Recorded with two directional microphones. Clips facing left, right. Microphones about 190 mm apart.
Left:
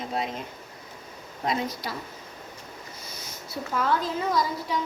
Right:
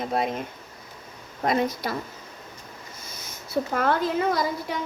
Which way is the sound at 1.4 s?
55° right (ahead or behind).